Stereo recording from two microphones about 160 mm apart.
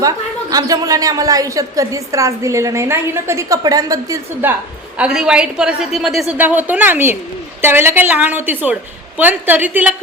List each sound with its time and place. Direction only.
0.5 s a woman's voice: 20° right (ahead or behind)